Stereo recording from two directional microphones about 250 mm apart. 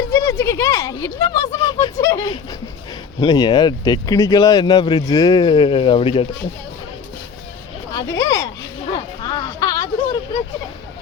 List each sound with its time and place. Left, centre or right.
0.1 s speech: centre
8.2 s children playing: centre
8.9 s a sound: centre